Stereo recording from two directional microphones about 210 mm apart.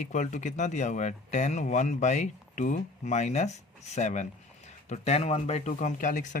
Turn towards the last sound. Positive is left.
turn(degrees=35)  # may be behind; listen again after turning